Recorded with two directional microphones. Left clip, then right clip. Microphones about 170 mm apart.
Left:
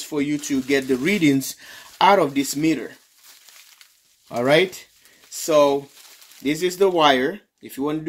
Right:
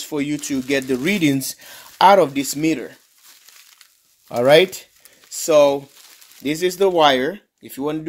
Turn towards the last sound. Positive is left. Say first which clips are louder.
# right 1 dB
turn(degrees=-30)  # may be behind; listen again after turning